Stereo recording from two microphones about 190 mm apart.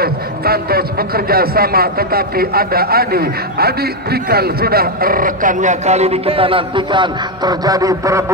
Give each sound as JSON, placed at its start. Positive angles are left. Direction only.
{"t": 0.0, "sound": "a man's voice", "side_deg": -55}